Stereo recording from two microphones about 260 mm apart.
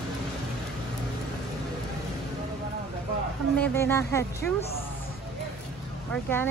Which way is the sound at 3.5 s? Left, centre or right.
Centre.